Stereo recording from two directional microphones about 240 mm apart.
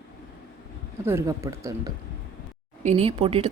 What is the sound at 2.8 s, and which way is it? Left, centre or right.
Speech, right.